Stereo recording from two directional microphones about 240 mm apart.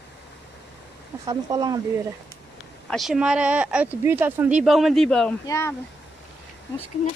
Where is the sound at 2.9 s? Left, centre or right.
Centre.